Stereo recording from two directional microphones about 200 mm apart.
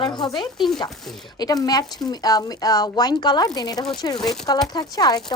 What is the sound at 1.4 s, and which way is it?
Speech, 20° left (ahead or behind).